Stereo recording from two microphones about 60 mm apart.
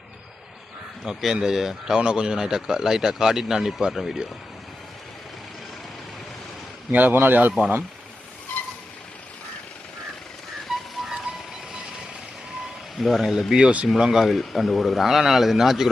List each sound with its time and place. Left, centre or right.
1.0 s speech: centre
6.9 s a man's voice: right
10.7 s a sound: centre
13.0 s speech: centre
13.6 s speech: right
13.8 s speech: centre